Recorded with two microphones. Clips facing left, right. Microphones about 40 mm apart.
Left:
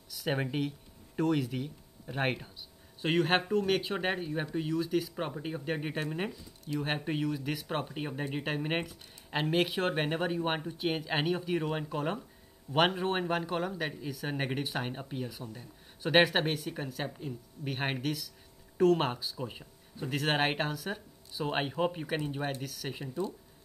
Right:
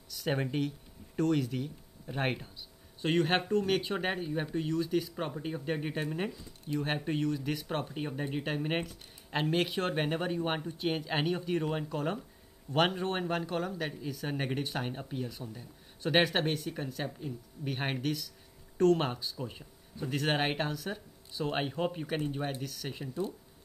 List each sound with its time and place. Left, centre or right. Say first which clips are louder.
0.1 s speech: even; centre
22.5 s speech: left 1 dB; centre